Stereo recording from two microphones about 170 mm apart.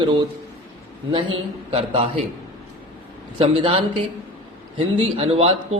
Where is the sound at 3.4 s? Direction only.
35° right (ahead or behind).